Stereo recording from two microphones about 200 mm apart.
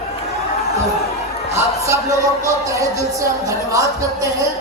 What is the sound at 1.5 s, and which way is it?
Speech, 15° right (ahead or behind).